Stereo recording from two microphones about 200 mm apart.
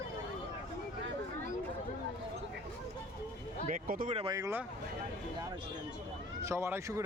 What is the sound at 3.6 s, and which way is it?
Speech, 45° right (ahead or behind).